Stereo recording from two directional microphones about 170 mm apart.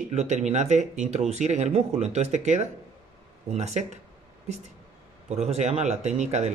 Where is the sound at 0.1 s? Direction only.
40° right (ahead or behind).